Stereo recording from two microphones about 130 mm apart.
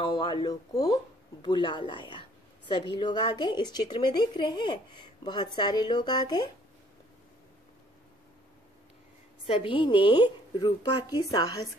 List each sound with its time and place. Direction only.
0.0 s a woman's voice: 35° left (ahead or behind)
9.5 s a woman's voice: 40° left (ahead or behind)